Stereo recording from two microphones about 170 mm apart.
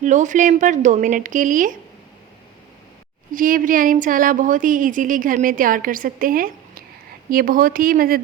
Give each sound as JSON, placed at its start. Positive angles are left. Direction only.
{"t": 0.0, "sound": "a woman's voice", "side_deg": -45}
{"t": 3.3, "sound": "a woman's voice", "side_deg": -55}